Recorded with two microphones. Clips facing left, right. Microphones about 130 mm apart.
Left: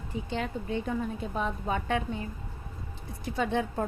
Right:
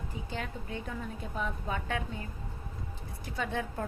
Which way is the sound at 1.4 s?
60° left (ahead or behind).